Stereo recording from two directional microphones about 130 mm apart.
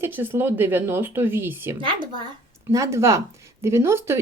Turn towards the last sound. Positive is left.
turn(degrees=-20)  # may be behind; listen again after turning